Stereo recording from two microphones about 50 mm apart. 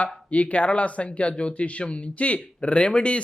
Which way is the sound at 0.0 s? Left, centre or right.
Left.